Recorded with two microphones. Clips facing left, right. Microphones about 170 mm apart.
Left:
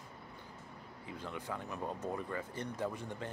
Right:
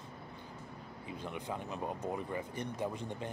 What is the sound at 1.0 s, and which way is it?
Speech, 20° right (ahead or behind).